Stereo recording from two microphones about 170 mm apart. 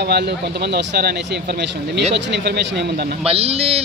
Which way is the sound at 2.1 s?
80° right.